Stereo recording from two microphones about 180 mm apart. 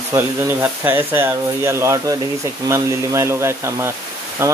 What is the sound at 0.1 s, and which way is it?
Speech, 10° right (ahead or behind).